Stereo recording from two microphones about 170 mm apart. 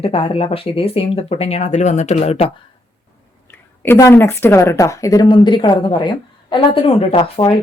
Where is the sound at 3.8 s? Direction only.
15° left (ahead or behind).